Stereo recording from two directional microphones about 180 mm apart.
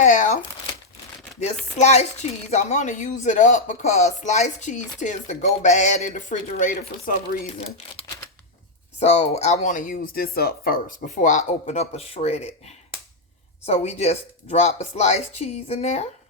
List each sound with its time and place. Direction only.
0.0 s crumpling: 45° left (ahead or behind)
1.8 s speech: 40° left (ahead or behind)
9.0 s speech: 35° left (ahead or behind)